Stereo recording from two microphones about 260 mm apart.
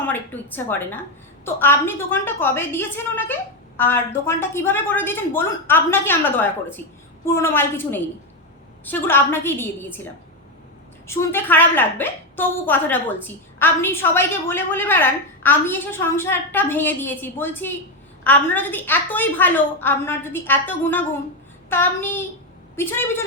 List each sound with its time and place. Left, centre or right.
0.0 s a woman's voice: centre